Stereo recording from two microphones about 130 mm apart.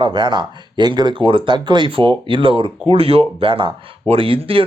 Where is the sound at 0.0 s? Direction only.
35° right (ahead or behind).